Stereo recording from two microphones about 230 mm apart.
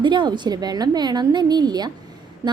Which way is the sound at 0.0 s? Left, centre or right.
Centre.